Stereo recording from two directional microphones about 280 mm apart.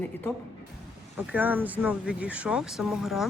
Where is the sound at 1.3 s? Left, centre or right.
Centre.